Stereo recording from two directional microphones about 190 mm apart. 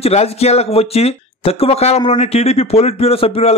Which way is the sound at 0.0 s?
35° left (ahead or behind).